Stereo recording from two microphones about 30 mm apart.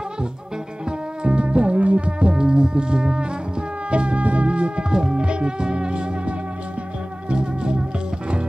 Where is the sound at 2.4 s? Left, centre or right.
Right.